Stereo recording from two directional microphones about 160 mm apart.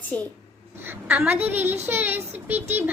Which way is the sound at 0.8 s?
10° right (ahead or behind).